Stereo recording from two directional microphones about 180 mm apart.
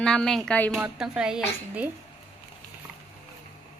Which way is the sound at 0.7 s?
5° right (ahead or behind).